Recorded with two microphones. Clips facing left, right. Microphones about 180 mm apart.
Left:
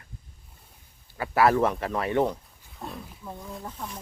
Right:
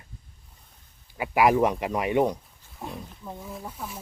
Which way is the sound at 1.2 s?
15° right (ahead or behind).